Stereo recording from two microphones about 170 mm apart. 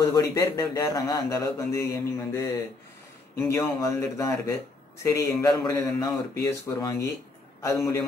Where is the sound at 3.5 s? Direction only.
20° left (ahead or behind).